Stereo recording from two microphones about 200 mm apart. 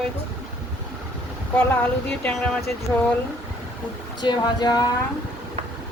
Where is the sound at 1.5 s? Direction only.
5° left (ahead or behind).